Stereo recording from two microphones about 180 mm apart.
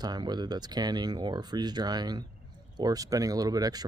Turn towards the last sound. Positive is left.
turn(degrees=-20)  # may be behind; listen again after turning